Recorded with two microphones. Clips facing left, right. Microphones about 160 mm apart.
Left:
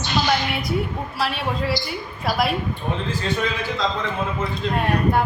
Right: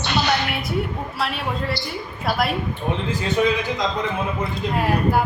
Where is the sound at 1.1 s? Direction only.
Centre (ahead or behind).